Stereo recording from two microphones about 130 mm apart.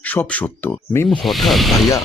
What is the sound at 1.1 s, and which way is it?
Speech, centre (ahead or behind).